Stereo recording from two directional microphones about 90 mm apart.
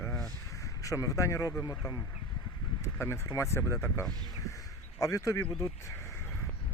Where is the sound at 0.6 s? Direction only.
35° left (ahead or behind).